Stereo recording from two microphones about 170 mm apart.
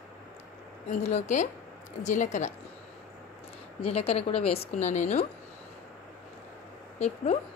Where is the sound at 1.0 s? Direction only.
40° left (ahead or behind).